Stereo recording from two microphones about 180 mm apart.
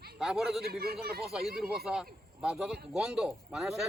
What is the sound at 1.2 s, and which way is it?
A man's voice, centre (ahead or behind).